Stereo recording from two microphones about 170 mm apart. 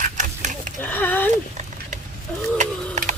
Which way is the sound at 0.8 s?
10° left (ahead or behind).